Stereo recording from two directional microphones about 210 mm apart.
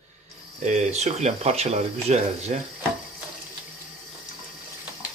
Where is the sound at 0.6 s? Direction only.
35° right (ahead or behind).